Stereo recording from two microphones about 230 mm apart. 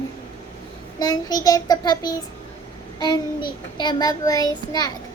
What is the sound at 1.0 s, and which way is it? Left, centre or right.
A child's voice, centre.